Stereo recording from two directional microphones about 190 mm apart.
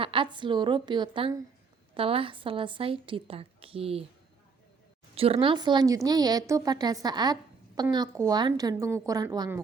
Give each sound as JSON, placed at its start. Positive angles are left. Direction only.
{"t": 0.0, "sound": "a woman's voice", "side_deg": -25}
{"t": 5.1, "sound": "a woman's voice", "side_deg": -30}